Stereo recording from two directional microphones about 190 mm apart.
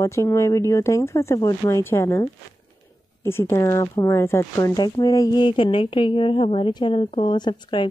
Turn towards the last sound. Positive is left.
turn(degrees=25)  # may be behind; listen again after turning